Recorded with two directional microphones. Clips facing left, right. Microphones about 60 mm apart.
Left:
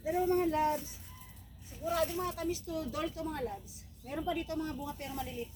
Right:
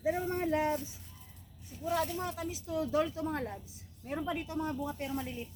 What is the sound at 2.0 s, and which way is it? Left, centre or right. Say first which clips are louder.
Speech: left 1 dB; centre.